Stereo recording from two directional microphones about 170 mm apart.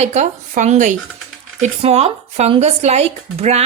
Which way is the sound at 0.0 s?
45° right (ahead or behind).